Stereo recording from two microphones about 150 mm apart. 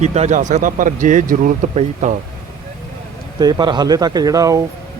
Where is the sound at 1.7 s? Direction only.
45° right (ahead or behind).